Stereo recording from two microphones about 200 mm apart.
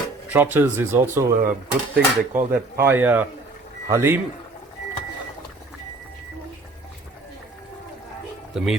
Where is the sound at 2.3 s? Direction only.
45° right (ahead or behind).